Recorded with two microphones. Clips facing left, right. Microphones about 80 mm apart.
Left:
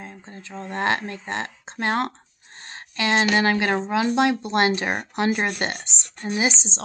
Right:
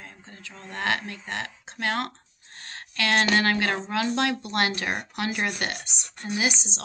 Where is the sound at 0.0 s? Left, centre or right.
Left.